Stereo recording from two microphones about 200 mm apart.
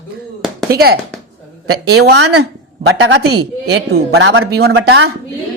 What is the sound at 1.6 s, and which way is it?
Speech, 90° right.